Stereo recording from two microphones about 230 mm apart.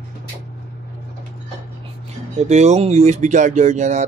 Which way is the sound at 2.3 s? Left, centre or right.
Right.